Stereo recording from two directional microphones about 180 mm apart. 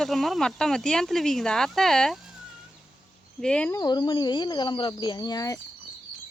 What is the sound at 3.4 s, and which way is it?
Speech, 5° left (ahead or behind).